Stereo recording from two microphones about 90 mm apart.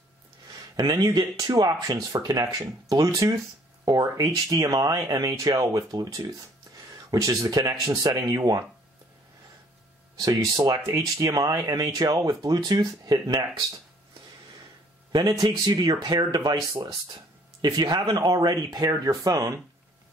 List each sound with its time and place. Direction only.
0.5 s speech: 45° right (ahead or behind)
10.1 s speech: 40° right (ahead or behind)
15.6 s speech: 45° right (ahead or behind)
17.6 s speech: 50° right (ahead or behind)